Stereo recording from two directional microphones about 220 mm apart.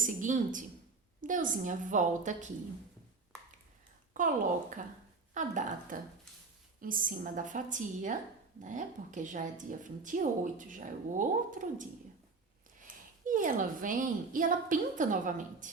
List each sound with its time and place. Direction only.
0.0 s a woman's voice: 35° right (ahead or behind)
4.1 s a child's voice: 35° right (ahead or behind)
13.2 s a woman's voice: 35° right (ahead or behind)